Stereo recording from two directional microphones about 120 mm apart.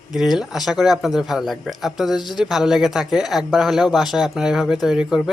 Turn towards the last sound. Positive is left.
turn(degrees=-5)  # may be behind; listen again after turning